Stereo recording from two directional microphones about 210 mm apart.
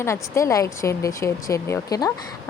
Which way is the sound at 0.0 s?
15° left (ahead or behind).